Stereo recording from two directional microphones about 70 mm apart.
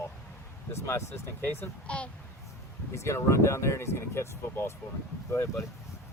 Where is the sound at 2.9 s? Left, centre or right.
Left.